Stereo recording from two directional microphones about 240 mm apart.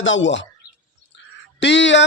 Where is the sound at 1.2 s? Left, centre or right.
Left.